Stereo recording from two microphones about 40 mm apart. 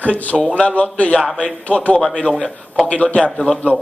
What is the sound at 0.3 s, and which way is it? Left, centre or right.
Speech, centre.